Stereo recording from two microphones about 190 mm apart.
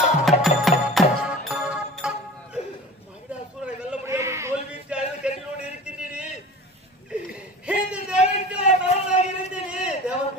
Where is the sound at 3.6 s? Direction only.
10° right (ahead or behind).